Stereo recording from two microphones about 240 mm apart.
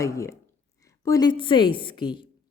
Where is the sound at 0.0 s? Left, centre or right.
Centre.